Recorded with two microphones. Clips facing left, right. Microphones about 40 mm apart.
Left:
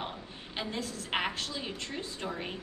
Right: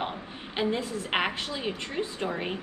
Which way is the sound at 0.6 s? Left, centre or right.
Right.